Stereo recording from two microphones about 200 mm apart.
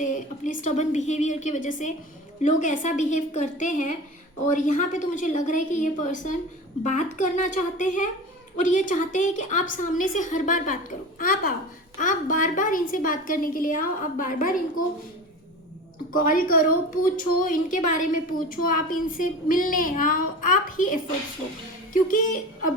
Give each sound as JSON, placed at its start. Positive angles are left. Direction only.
{"t": 0.0, "sound": "a woman's voice", "side_deg": 40}
{"t": 16.1, "sound": "a woman's voice", "side_deg": 40}
{"t": 22.0, "sound": "a woman's voice", "side_deg": 45}